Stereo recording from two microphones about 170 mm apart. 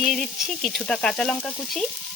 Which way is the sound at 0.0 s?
Centre (ahead or behind).